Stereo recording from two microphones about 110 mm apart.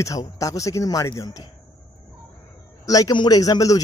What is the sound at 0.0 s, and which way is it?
A man's voice, 30° left (ahead or behind).